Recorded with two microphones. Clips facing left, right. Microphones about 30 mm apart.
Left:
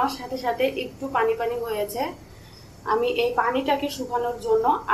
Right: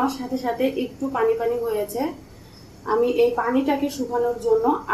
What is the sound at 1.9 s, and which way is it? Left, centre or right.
Speech, left.